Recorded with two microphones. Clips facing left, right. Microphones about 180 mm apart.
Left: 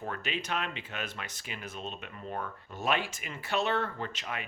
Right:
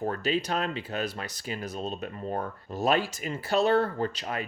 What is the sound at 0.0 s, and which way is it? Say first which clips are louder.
Speech: right 8 dB; 35° right (ahead or behind).